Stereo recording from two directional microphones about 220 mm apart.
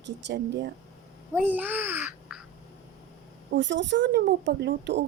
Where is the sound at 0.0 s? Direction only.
50° right (ahead or behind).